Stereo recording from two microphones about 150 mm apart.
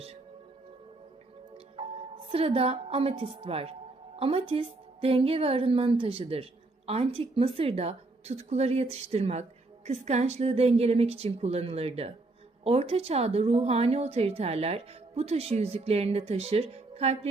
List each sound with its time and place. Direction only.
1.7 s a woman's voice: 40° right (ahead or behind)